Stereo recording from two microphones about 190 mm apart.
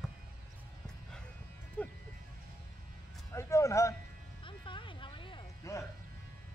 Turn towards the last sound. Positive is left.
turn(degrees=15)  # may be behind; listen again after turning